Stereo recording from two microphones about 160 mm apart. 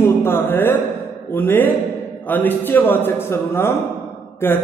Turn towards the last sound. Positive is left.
turn(degrees=15)  # may be behind; listen again after turning